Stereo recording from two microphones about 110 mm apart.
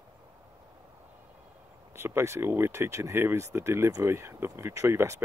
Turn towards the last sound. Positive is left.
turn(degrees=-25)  # may be behind; listen again after turning